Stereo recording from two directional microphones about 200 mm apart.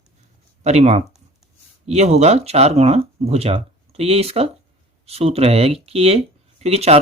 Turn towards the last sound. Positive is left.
turn(degrees=-30)  # may be behind; listen again after turning